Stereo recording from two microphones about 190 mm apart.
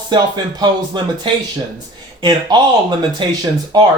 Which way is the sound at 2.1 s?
25° right (ahead or behind).